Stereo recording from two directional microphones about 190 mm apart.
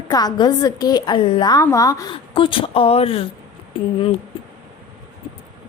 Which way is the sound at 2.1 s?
30° left (ahead or behind).